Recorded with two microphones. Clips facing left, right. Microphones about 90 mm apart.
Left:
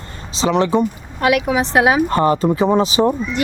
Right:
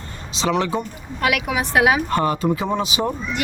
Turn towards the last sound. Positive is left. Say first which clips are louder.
# left 7 dB
turn(degrees=30)  # may be behind; listen again after turning